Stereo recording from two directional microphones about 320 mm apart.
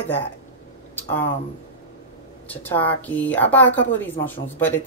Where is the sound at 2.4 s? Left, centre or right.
Centre.